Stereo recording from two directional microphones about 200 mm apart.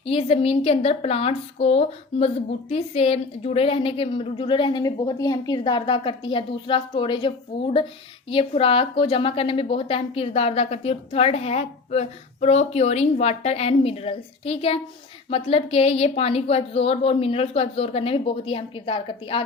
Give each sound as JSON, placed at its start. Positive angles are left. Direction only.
{"t": 0.0, "sound": "a woman's voice", "side_deg": 30}